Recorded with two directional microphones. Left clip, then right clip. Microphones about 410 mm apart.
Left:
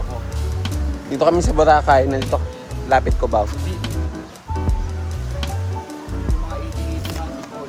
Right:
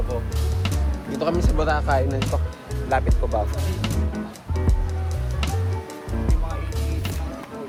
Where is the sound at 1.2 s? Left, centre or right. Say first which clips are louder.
Left 9 dB; centre.